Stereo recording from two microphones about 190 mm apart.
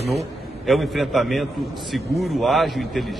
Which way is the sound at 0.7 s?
Centre (ahead or behind).